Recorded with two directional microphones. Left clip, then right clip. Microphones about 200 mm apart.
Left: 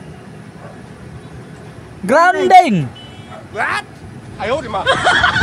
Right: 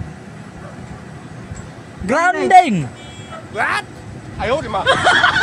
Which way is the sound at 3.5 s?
Centre (ahead or behind).